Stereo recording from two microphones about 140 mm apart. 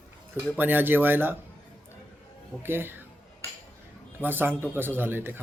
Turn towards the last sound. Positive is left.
turn(degrees=-15)  # may be behind; listen again after turning